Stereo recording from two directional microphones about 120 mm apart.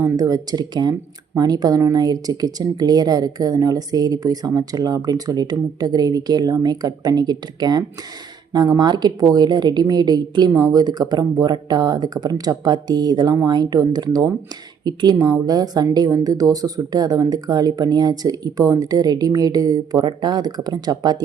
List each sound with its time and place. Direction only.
0.2 s a woman's voice: 30° right (ahead or behind)